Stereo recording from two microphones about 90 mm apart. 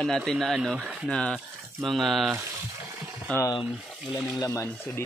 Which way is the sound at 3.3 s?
10° left (ahead or behind).